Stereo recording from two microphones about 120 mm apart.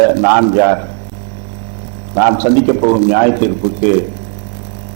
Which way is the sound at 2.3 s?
10° right (ahead or behind).